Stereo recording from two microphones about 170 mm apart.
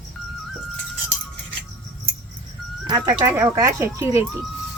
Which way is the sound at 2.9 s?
25° right (ahead or behind).